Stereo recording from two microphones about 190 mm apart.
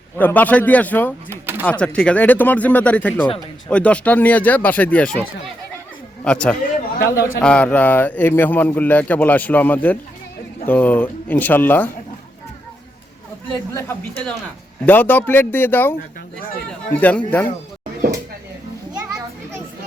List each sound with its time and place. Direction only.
0.2 s speech: 10° left (ahead or behind)
1.3 s speech: 10° right (ahead or behind)
1.8 s speech: 5° left (ahead or behind)
6.2 s a man's voice: 5° left (ahead or behind)
7.0 s a man's voice: 60° left (ahead or behind)
7.3 s speech: 5° left (ahead or behind)
13.7 s speech: 10° left (ahead or behind)